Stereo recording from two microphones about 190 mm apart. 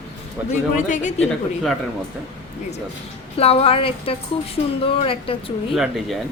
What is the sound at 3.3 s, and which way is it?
Speech, 30° left (ahead or behind).